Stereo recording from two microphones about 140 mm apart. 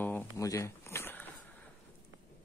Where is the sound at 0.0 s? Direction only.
15° left (ahead or behind).